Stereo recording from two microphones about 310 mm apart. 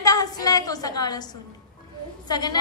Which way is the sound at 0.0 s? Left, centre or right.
Centre.